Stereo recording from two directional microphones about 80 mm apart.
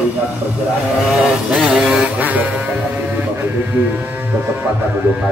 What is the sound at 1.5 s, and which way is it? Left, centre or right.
Music, centre.